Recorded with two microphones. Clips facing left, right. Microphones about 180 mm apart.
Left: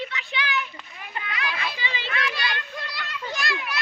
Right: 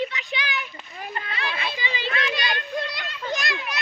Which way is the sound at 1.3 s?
30° right (ahead or behind).